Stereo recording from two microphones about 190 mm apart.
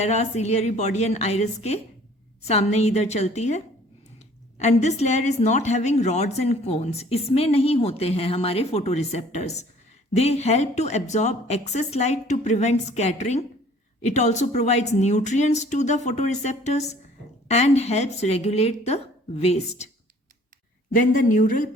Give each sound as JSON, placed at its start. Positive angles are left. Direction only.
{"t": 0.0, "sound": "a woman's voice", "side_deg": 35}
{"t": 4.6, "sound": "a woman's voice", "side_deg": 35}
{"t": 20.9, "sound": "speech", "side_deg": 40}